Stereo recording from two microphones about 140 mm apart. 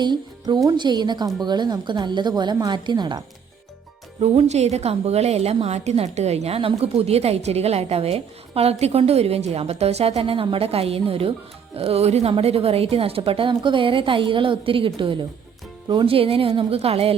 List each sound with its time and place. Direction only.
0.0 s a woman's voice: 30° right (ahead or behind)
4.2 s a woman's voice: 50° right (ahead or behind)